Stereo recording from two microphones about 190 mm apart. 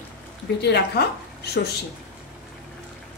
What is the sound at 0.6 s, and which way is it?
A woman's voice, 60° left (ahead or behind).